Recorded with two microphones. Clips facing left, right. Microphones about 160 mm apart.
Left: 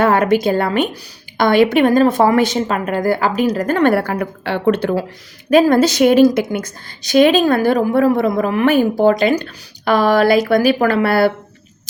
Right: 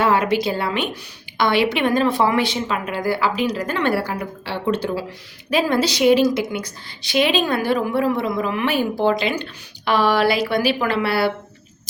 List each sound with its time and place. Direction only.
0.0 s a woman's voice: 50° left (ahead or behind)
5.5 s a woman's voice: 45° left (ahead or behind)